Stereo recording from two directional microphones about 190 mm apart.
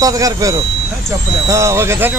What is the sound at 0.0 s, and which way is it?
Speech, 20° right (ahead or behind).